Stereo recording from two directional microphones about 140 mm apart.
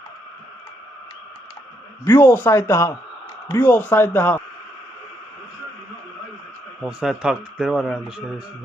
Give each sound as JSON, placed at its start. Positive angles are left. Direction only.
{"t": 2.0, "sound": "speech", "side_deg": 20}
{"t": 6.8, "sound": "speech", "side_deg": -5}